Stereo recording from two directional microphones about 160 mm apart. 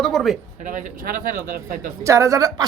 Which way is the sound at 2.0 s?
20° right (ahead or behind).